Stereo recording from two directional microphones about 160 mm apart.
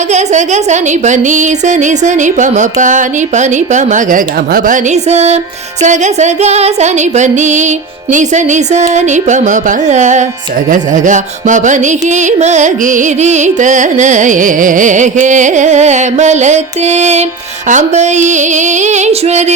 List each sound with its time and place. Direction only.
0.1 s carnatic music: 45° right (ahead or behind)